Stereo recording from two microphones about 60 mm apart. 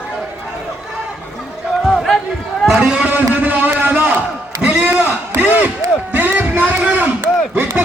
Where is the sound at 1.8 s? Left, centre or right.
Centre.